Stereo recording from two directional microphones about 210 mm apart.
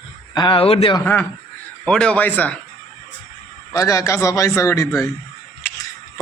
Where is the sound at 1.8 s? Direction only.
5° left (ahead or behind).